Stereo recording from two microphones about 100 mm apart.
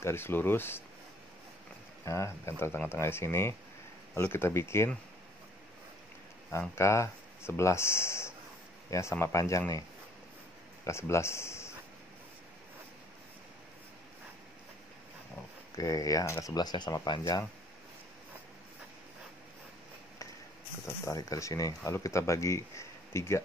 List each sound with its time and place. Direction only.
0.0 s speech: 25° left (ahead or behind)
2.0 s speech: 25° left (ahead or behind)
6.7 s speech: 30° left (ahead or behind)
10.9 s speech: 25° left (ahead or behind)
15.7 s speech: 35° left (ahead or behind)
17.2 s speech: 25° left (ahead or behind)
20.8 s speech: 30° left (ahead or behind)